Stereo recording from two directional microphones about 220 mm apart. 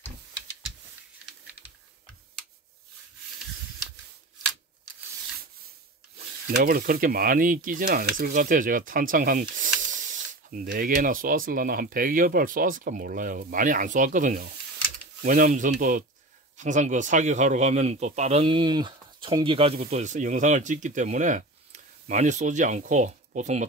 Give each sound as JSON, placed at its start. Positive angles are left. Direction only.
{"t": 6.5, "sound": "speech", "side_deg": -45}